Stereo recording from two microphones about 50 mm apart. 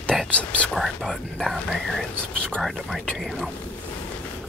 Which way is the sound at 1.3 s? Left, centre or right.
Centre.